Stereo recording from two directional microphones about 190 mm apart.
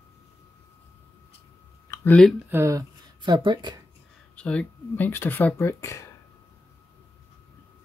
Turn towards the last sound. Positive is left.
turn(degrees=15)  # may be behind; listen again after turning